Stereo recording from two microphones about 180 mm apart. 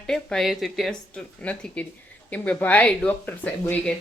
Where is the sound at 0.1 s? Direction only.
Centre (ahead or behind).